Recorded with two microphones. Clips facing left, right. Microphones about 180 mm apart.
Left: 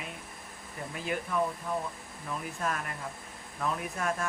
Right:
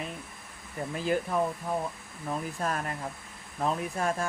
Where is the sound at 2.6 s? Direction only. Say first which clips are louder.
Right 3 dB; 35° right (ahead or behind).